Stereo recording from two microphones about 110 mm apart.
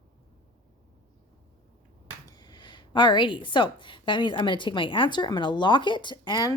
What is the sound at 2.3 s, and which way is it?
Speech, 40° left (ahead or behind).